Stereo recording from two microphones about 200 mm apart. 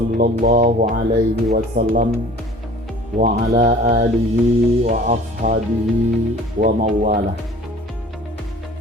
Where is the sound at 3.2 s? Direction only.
40° right (ahead or behind).